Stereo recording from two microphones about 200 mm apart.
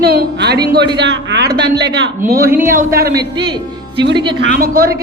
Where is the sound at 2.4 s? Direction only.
10° right (ahead or behind).